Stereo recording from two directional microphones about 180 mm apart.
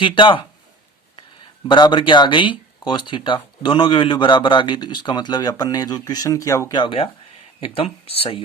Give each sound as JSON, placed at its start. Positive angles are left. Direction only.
{"t": 0.0, "sound": "speech", "side_deg": 25}
{"t": 1.6, "sound": "speech", "side_deg": 25}